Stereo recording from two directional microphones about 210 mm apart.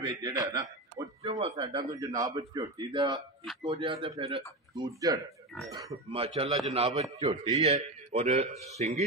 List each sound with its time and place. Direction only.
0.0 s a man's voice: 20° right (ahead or behind)
1.2 s a man's voice: 30° right (ahead or behind)
6.0 s a man's voice: 30° right (ahead or behind)